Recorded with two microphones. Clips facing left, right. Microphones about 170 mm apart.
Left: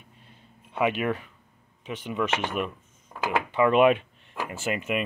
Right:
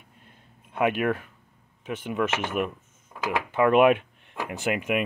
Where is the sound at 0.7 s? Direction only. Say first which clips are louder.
Right 1 dB; 50° right (ahead or behind).